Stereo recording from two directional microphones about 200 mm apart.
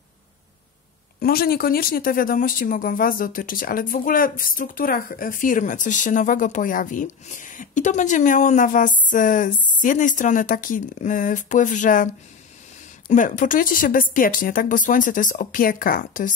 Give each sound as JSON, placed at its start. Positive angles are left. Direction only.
{"t": 1.2, "sound": "speech", "side_deg": 50}
{"t": 13.1, "sound": "speech", "side_deg": 40}